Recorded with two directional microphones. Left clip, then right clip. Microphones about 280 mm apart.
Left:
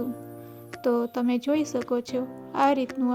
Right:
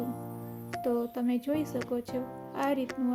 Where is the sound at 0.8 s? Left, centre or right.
Left.